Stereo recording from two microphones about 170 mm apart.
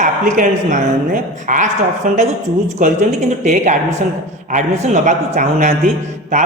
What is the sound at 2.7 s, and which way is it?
Speech, 45° right (ahead or behind).